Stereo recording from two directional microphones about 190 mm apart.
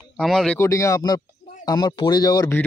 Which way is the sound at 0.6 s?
15° left (ahead or behind).